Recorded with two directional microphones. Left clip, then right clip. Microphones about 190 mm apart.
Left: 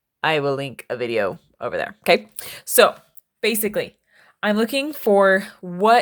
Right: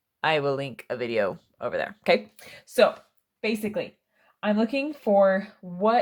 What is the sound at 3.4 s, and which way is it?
A woman's voice, 60° left (ahead or behind).